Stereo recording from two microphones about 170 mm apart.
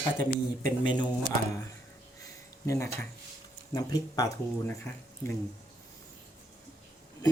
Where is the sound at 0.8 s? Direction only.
25° left (ahead or behind).